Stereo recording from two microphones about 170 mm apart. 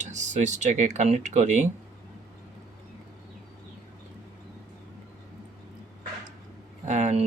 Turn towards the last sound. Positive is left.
turn(degrees=-45)  # may be behind; listen again after turning